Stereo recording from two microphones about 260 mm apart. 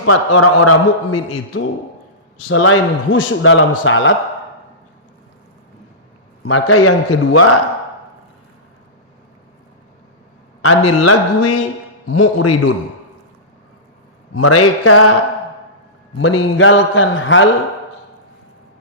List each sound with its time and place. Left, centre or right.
0.0 s a man's voice: left
6.4 s a man's voice: left
10.6 s a man's voice: left
14.3 s a man's voice: left
16.1 s a man's voice: left